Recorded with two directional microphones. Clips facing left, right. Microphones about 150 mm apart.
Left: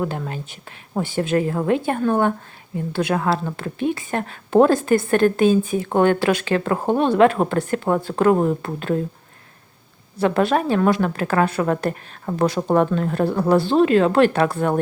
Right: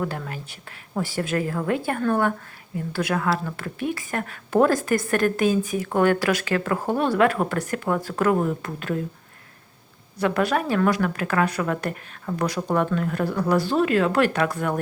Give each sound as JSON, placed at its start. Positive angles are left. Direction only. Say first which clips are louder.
{"t": 0.0, "sound": "a woman's voice", "louder": "left 4 dB", "side_deg": 20}
{"t": 10.2, "sound": "a woman's voice", "louder": "left 4 dB", "side_deg": 30}